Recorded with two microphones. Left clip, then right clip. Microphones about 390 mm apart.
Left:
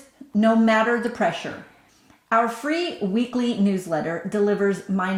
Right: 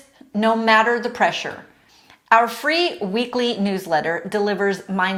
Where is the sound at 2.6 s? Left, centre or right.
Right.